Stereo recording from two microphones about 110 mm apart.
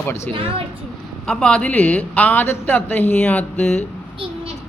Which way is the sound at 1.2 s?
5° left (ahead or behind).